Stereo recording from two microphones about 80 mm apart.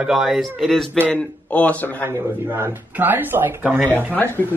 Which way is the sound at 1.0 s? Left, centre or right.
Centre.